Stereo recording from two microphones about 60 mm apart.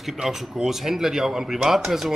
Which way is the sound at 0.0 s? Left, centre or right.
Centre.